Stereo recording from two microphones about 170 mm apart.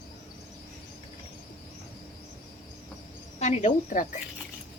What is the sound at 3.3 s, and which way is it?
Speech, 40° left (ahead or behind).